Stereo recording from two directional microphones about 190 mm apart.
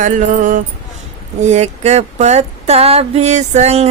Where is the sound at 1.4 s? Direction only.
40° right (ahead or behind).